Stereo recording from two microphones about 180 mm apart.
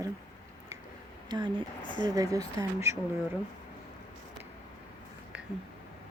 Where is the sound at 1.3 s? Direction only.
25° right (ahead or behind).